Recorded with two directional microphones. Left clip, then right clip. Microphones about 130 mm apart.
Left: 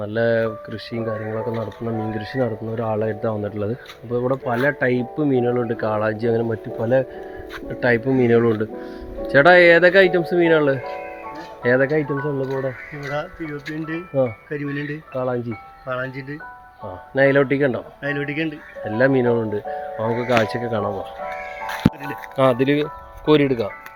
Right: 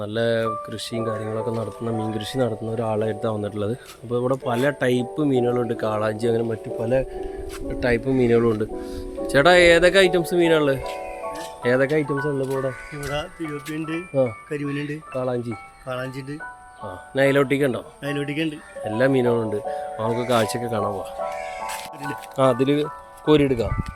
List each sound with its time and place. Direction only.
0.0 s speech: centre (ahead or behind)
0.9 s speech: 15° right (ahead or behind)
5.1 s speech: centre (ahead or behind)
7.7 s speech: centre (ahead or behind)
13.0 s speech: 25° right (ahead or behind)
15.1 s speech: 5° right (ahead or behind)
15.4 s speech: 40° right (ahead or behind)
16.8 s speech: 10° left (ahead or behind)
18.0 s speech: 35° right (ahead or behind)
18.9 s speech: 5° left (ahead or behind)
22.0 s speech: 15° right (ahead or behind)